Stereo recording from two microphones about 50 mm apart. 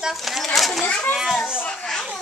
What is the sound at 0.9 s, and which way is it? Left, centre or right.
Speech, left.